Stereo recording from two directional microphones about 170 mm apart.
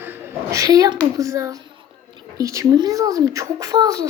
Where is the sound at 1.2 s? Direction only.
20° right (ahead or behind).